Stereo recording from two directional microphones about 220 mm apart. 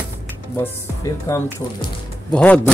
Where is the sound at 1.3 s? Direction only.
15° left (ahead or behind).